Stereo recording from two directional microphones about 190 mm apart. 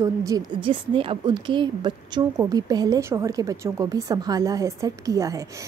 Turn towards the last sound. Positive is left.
turn(degrees=-15)  # may be behind; listen again after turning